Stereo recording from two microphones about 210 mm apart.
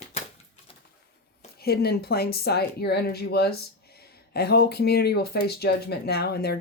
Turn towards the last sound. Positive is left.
turn(degrees=50)  # may be behind; listen again after turning